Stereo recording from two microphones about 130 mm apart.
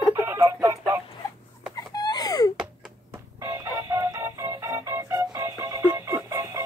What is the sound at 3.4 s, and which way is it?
Music, 20° right (ahead or behind).